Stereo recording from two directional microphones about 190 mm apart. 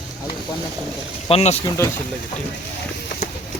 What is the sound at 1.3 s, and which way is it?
Speech, 30° left (ahead or behind).